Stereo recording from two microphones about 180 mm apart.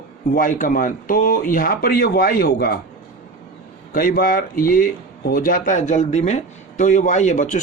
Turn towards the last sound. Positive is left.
turn(degrees=45)  # may be behind; listen again after turning